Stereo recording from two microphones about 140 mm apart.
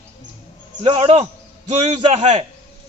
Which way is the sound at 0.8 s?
40° right (ahead or behind).